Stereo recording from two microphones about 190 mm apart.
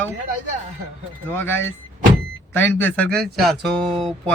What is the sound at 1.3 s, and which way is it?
A man's voice, 10° left (ahead or behind).